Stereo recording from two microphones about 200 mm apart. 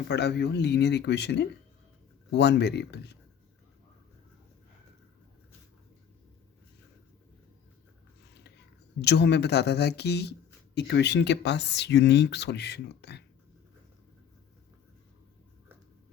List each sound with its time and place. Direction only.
0.1 s speech: 55° left (ahead or behind)
9.0 s speech: 55° left (ahead or behind)